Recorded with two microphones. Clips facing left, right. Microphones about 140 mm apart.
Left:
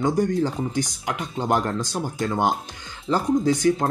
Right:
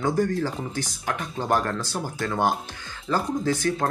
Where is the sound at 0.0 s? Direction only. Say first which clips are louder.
Left 2 dB; 20° left (ahead or behind).